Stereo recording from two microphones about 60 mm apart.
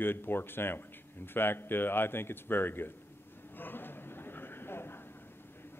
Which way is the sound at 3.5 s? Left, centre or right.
Left.